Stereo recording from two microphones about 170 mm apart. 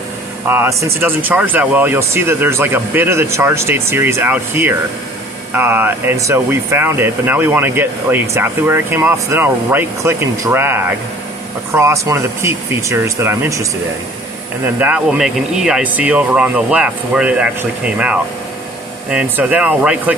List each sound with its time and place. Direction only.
0.5 s speech: 15° right (ahead or behind)
14.8 s speech: 10° right (ahead or behind)